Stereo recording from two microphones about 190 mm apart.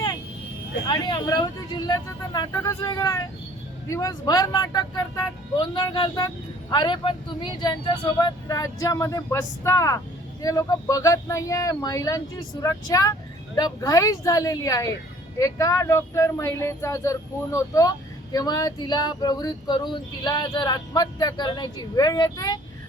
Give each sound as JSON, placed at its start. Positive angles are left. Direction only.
{"t": 0.9, "sound": "speech", "side_deg": 25}